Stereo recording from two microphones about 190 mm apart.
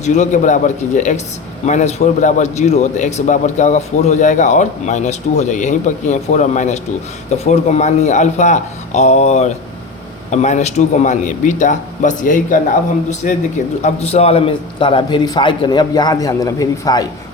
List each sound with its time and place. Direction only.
0.0 s a man's voice: 40° left (ahead or behind); by 17.1 s 20° left (ahead or behind)